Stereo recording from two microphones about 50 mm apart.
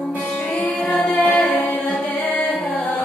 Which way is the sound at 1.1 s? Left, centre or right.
Left.